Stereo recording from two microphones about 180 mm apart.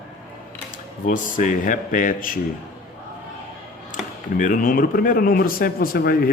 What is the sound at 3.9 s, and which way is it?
Speech, 45° left (ahead or behind).